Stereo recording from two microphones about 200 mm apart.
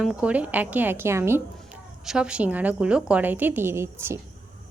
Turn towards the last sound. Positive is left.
turn(degrees=-10)  # may be behind; listen again after turning